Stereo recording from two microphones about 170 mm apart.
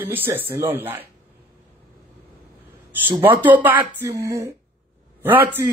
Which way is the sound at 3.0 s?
10° right (ahead or behind).